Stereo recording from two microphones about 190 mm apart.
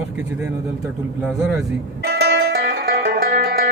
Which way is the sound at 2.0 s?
60° right (ahead or behind).